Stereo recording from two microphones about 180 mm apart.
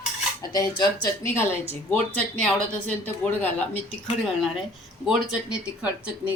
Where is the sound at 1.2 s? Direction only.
15° left (ahead or behind); by 5.6 s 5° right (ahead or behind).